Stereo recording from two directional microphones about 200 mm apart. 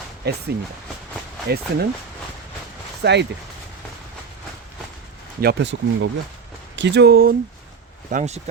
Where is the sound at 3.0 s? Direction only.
60° right (ahead or behind).